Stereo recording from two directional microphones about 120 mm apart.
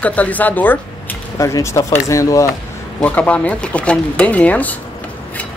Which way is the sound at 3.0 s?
15° left (ahead or behind).